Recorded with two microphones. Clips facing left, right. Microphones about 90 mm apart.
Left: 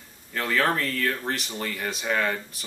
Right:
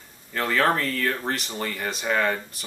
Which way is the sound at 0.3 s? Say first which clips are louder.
Right 2 dB; centre (ahead or behind).